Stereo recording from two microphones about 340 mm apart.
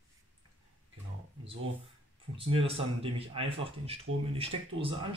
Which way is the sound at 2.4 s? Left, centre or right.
Centre.